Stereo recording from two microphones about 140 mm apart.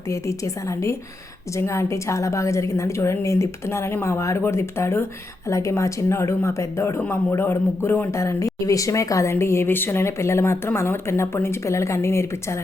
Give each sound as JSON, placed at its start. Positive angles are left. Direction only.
{"t": 0.1, "sound": "speech", "side_deg": 20}